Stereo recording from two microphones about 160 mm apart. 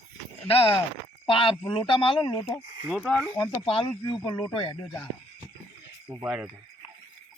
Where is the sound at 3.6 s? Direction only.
35° left (ahead or behind).